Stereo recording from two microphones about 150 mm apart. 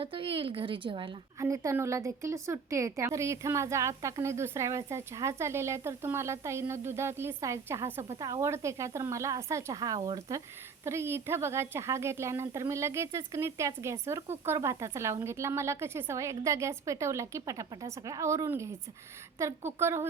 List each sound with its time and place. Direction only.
0.0 s a woman's voice: 35° right (ahead or behind)
1.4 s a woman's voice: 20° right (ahead or behind)